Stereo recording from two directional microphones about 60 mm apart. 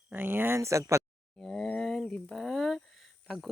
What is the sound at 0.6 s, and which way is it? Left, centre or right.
Speech, right.